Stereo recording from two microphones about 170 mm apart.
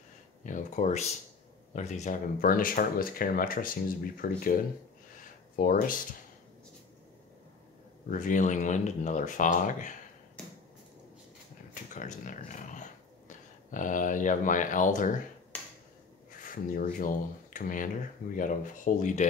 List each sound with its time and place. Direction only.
0.4 s speech: 50° left (ahead or behind)
5.6 s speech: 55° left (ahead or behind)
8.1 s speech: 50° left (ahead or behind)
11.7 s a sound: 50° left (ahead or behind)
16.3 s speech: 50° left (ahead or behind)